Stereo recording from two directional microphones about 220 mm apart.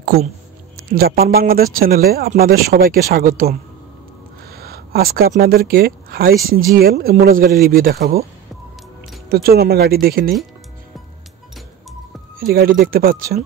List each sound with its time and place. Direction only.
0.7 s speech: 45° right (ahead or behind)
9.3 s speech: 45° right (ahead or behind)
12.4 s speech: 40° right (ahead or behind)